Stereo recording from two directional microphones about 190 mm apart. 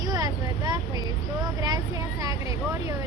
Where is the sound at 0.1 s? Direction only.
20° right (ahead or behind).